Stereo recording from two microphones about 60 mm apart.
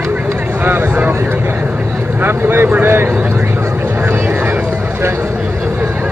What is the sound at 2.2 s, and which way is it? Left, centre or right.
Vehicle, right.